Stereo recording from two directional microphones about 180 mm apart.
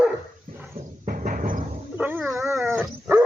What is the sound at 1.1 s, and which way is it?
Music, 50° right (ahead or behind).